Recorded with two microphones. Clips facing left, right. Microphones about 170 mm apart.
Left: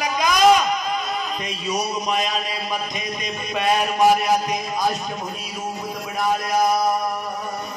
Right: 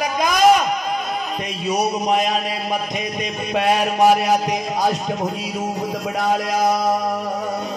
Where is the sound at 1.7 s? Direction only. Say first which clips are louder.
Right 5 dB; 60° right (ahead or behind); by 7.1 s 75° right (ahead or behind).